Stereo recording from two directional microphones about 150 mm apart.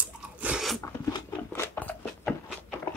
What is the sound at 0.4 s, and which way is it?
Crunch, 5° right (ahead or behind).